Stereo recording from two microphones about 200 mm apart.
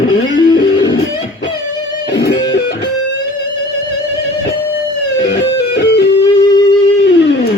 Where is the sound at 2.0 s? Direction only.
60° left (ahead or behind).